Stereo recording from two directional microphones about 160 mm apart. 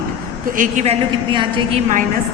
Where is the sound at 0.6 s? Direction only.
50° right (ahead or behind).